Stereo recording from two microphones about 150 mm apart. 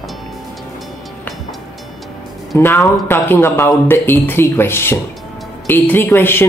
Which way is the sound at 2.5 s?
15° left (ahead or behind).